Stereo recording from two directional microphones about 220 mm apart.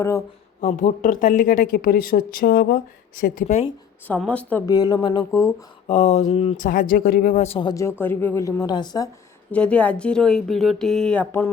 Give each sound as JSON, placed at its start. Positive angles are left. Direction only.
{"t": 0.6, "sound": "speech", "side_deg": 35}
{"t": 4.0, "sound": "speech", "side_deg": 5}
{"t": 5.9, "sound": "speech", "side_deg": 30}
{"t": 9.5, "sound": "a woman's voice", "side_deg": 5}